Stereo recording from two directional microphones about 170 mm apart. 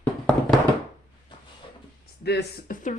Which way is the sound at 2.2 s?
75° left (ahead or behind).